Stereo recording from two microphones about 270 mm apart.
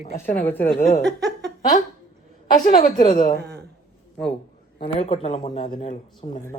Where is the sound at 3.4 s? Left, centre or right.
Right.